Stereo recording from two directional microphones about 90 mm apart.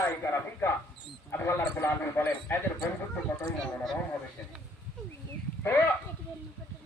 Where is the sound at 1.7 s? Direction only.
25° left (ahead or behind).